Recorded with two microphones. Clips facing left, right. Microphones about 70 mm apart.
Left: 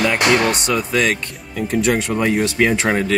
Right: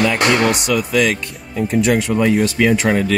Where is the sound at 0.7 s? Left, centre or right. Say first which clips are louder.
Right 2 dB; left.